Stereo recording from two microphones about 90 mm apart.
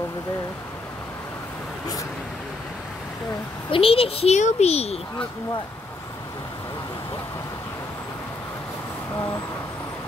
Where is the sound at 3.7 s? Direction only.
90° left.